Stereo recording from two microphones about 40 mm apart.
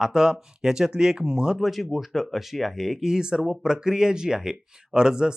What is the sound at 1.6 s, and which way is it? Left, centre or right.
Speech, centre.